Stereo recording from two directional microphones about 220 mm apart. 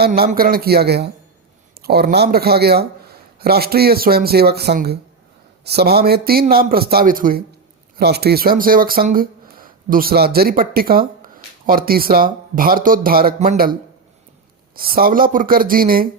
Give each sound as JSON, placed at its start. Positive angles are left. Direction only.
{"t": 0.0, "sound": "speech", "side_deg": -45}
{"t": 14.8, "sound": "speech", "side_deg": -40}